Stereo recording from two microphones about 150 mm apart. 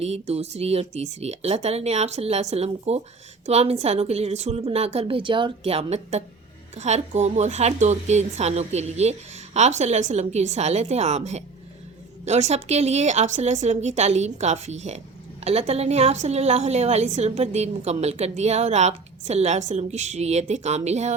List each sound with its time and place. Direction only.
0.0 s a woman's voice: 45° right (ahead or behind)